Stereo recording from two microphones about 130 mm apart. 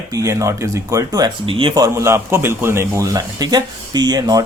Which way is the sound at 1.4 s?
45° right (ahead or behind).